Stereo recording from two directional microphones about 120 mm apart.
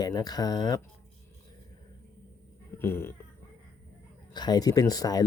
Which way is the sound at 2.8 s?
20° left (ahead or behind).